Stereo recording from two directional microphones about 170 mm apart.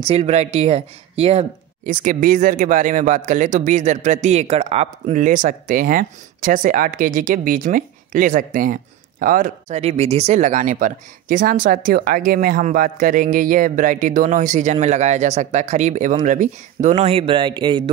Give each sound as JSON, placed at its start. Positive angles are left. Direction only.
{"t": 0.0, "sound": "speech", "side_deg": -35}
{"t": 1.9, "sound": "speech", "side_deg": -50}